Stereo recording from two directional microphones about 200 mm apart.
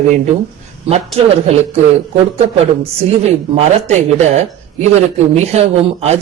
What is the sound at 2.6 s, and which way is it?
Speech, 30° right (ahead or behind).